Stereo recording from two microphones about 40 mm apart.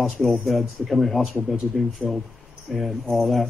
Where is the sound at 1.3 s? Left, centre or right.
Right.